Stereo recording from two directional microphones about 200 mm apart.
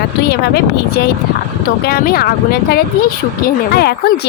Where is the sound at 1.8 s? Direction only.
50° left (ahead or behind).